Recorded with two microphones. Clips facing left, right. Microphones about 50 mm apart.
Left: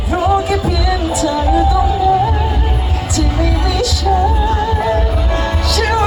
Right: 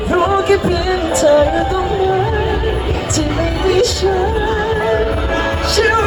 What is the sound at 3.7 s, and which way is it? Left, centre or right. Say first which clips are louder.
Music: right 4 dB; right.